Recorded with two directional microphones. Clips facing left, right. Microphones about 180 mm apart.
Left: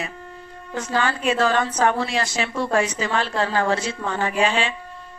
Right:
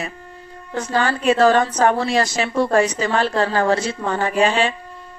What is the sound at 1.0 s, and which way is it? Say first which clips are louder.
A woman's voice: right 7 dB; 40° right (ahead or behind).